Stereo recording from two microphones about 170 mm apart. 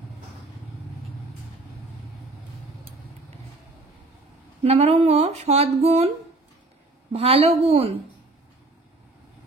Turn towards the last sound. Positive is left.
turn(degrees=-35)  # may be behind; listen again after turning